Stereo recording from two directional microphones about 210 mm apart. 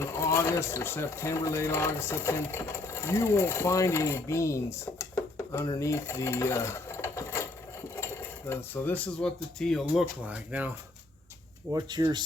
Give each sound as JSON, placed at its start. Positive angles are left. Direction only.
{"t": 0.0, "sound": "speech", "side_deg": 15}
{"t": 11.7, "sound": "speech", "side_deg": -20}